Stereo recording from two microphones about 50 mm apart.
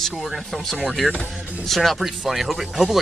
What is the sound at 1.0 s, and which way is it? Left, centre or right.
Speech, centre.